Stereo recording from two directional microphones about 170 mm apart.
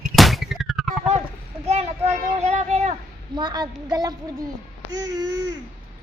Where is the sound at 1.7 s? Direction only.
40° right (ahead or behind).